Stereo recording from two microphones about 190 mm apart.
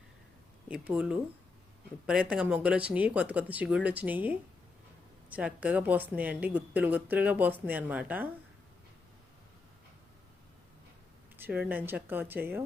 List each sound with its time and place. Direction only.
0.7 s a woman's voice: 5° right (ahead or behind)
11.3 s a woman's voice: 10° right (ahead or behind)